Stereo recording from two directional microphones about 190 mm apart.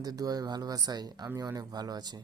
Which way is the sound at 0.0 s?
20° right (ahead or behind).